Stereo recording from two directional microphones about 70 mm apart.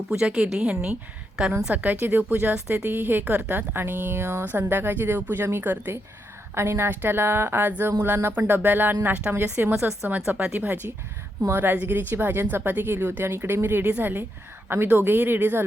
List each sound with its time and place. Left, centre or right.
0.1 s a woman's voice: centre; by 15.6 s right